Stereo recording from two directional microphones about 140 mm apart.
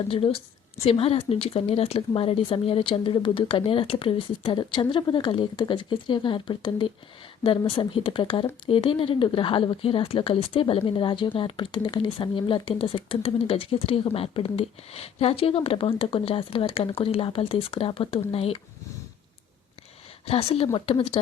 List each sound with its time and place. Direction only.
0.1 s speech: 40° left (ahead or behind)
20.2 s speech: 45° left (ahead or behind)